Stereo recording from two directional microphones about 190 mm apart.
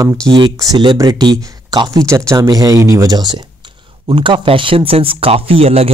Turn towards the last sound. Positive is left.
turn(degrees=-30)  # may be behind; listen again after turning